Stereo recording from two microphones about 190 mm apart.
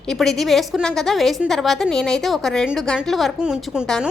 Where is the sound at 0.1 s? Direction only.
Centre (ahead or behind).